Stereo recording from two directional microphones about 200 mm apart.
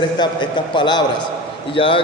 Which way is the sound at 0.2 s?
25° left (ahead or behind).